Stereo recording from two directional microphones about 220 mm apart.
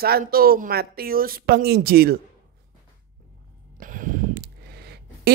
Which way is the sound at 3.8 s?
40° right (ahead or behind).